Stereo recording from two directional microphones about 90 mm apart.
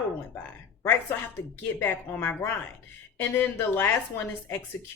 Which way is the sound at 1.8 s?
20° left (ahead or behind).